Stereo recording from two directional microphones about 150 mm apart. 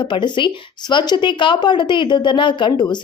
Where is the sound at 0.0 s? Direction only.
30° left (ahead or behind).